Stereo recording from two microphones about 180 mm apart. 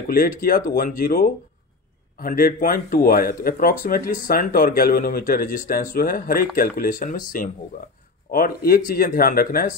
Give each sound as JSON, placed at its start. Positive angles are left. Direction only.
{"t": 0.1, "sound": "speech", "side_deg": 50}